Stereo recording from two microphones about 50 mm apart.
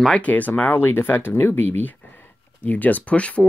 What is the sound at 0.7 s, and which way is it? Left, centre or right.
Speech, left.